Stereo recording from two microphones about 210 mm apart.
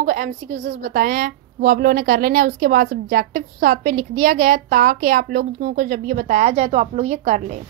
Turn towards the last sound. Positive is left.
turn(degrees=-35)  # may be behind; listen again after turning